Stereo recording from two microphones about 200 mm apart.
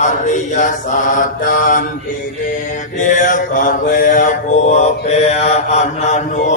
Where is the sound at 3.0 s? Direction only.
40° left (ahead or behind).